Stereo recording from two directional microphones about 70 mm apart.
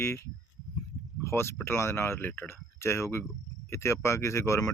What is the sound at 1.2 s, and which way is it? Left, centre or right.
Speech, left.